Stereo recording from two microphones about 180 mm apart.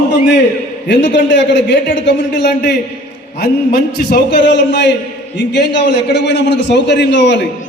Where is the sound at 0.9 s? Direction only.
85° left.